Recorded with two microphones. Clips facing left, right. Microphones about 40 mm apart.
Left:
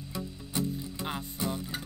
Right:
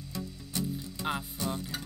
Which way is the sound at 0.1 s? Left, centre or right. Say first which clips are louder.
Left 2 dB; left.